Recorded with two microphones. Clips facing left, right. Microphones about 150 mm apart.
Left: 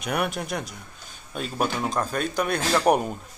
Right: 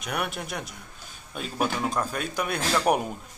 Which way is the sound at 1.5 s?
35° left (ahead or behind).